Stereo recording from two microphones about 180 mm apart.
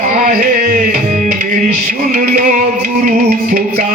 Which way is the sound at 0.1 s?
50° right (ahead or behind).